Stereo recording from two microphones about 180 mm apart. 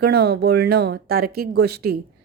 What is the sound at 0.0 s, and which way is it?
A woman's voice, 60° right (ahead or behind).